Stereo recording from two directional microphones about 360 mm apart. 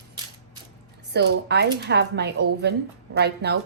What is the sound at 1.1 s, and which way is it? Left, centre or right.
A woman's voice, right.